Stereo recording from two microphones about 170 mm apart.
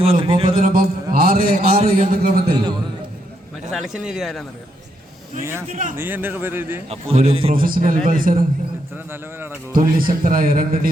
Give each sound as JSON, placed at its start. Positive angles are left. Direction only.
{"t": 0.0, "sound": "a man's voice", "side_deg": -30}
{"t": 0.6, "sound": "a man's voice", "side_deg": -60}
{"t": 1.1, "sound": "a sound", "side_deg": -60}
{"t": 1.8, "sound": "a man's voice", "side_deg": -45}
{"t": 3.7, "sound": "speech", "side_deg": 0}
{"t": 5.4, "sound": "speech", "side_deg": -15}
{"t": 5.7, "sound": "a man's voice", "side_deg": -50}
{"t": 6.0, "sound": "speech", "side_deg": -10}
{"t": 6.9, "sound": "a man's voice", "side_deg": -35}
{"t": 7.5, "sound": "a man's voice", "side_deg": -55}
{"t": 9.7, "sound": "speech", "side_deg": -55}